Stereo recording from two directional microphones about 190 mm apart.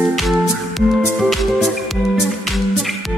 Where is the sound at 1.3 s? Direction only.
Centre (ahead or behind).